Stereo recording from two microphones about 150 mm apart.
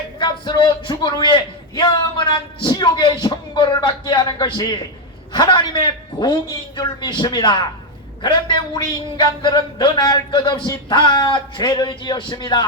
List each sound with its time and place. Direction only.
0.2 s a man's voice: 30° left (ahead or behind)